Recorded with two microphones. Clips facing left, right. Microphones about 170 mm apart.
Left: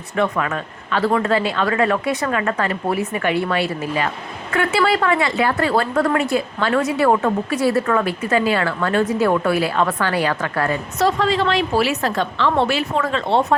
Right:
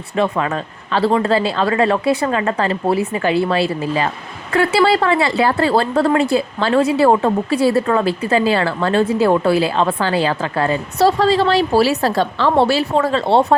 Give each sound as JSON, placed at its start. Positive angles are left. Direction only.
{"t": 0.2, "sound": "a woman's voice", "side_deg": -25}